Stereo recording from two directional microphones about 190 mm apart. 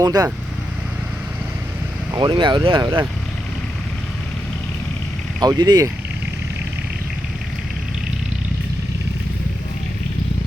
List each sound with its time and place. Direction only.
0.0 s speech: 20° right (ahead or behind)
2.1 s speech: 25° right (ahead or behind)
5.4 s speech: 20° right (ahead or behind)